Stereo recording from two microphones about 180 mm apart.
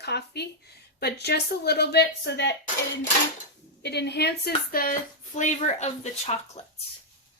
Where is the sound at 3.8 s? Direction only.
70° left (ahead or behind); by 6.6 s 40° left (ahead or behind).